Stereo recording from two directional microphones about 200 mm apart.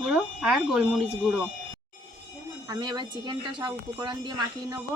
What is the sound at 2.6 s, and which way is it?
Speech, 20° right (ahead or behind).